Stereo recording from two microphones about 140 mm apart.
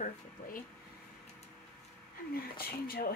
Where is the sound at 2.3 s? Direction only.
90° left.